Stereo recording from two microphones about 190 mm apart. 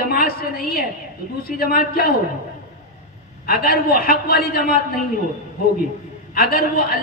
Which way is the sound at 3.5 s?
55° left (ahead or behind).